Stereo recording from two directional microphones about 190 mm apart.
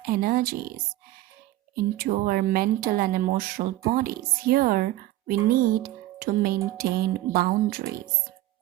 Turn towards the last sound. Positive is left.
turn(degrees=-50)  # may be behind; listen again after turning